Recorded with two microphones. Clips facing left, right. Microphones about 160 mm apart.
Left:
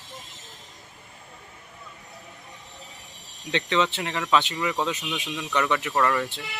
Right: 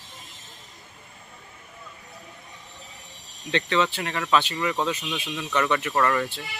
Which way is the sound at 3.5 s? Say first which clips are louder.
Right 1 dB; 15° left (ahead or behind).